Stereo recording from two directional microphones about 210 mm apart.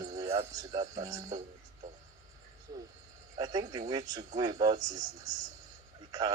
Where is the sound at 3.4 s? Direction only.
20° right (ahead or behind).